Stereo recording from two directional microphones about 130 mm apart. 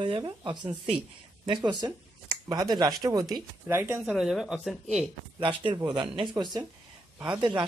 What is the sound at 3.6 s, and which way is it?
Speech, 20° right (ahead or behind).